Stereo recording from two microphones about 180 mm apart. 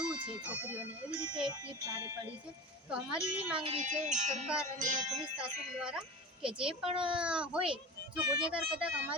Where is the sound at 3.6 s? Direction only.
30° right (ahead or behind).